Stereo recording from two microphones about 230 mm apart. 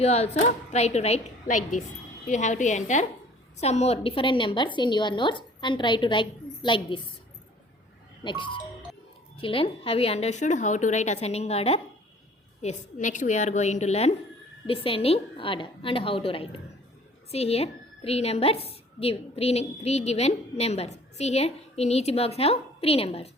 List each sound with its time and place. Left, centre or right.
0.0 s a woman's voice: left
8.2 s a woman's voice: left